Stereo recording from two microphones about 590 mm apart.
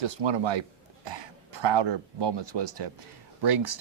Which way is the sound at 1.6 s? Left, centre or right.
Right.